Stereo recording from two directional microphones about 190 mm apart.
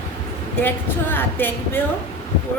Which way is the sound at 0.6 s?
10° left (ahead or behind).